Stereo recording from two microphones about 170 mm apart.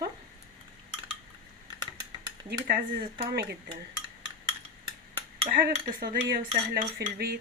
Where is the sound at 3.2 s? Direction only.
75° right (ahead or behind).